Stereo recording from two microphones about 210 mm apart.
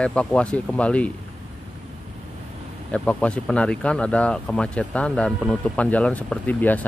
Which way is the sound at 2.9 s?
5° left (ahead or behind).